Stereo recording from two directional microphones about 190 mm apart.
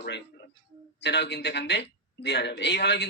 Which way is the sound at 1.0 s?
65° left (ahead or behind).